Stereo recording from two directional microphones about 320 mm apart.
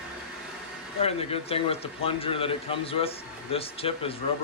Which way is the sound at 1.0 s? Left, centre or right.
Centre.